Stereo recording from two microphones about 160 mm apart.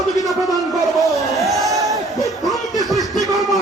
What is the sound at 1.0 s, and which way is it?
Crowd, centre (ahead or behind).